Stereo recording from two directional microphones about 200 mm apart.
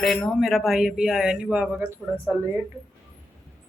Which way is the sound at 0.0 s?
Centre (ahead or behind).